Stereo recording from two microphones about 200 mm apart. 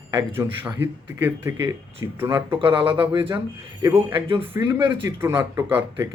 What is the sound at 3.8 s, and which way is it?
Speech, 10° right (ahead or behind).